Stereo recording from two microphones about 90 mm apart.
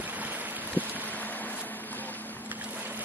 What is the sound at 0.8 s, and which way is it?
Boat, 20° right (ahead or behind).